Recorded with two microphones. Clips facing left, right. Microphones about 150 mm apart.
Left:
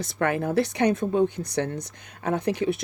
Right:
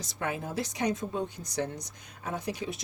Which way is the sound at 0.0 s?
65° left (ahead or behind).